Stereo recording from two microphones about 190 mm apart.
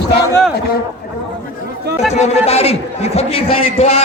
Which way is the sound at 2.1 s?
35° left (ahead or behind).